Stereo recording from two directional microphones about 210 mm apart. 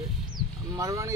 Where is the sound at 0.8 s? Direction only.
15° right (ahead or behind).